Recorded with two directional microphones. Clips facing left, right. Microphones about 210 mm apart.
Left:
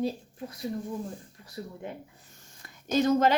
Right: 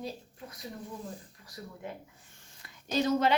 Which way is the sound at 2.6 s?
50° left (ahead or behind).